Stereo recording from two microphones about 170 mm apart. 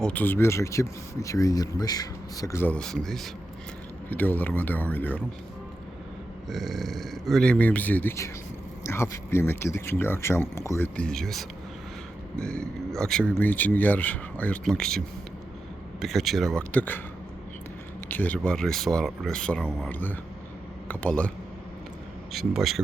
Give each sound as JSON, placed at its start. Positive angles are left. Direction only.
{"t": 0.0, "sound": "speech", "side_deg": 10}
{"t": 6.5, "sound": "speech", "side_deg": 0}
{"t": 18.1, "sound": "speech", "side_deg": 10}